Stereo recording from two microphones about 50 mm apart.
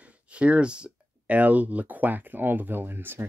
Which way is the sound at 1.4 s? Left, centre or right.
Right.